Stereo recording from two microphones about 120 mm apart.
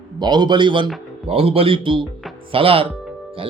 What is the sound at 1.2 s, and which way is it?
Speech, 55° right (ahead or behind).